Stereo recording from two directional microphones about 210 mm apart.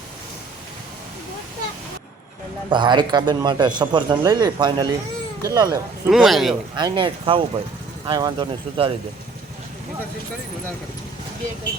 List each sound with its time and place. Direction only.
2.6 s speech: 20° right (ahead or behind)
6.1 s a man's voice: centre (ahead or behind)
6.7 s speech: 20° right (ahead or behind)